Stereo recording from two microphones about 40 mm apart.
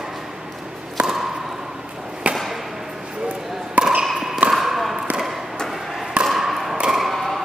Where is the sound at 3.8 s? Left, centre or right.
Right.